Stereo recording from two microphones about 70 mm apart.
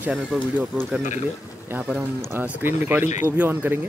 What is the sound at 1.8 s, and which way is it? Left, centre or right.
Speech, centre.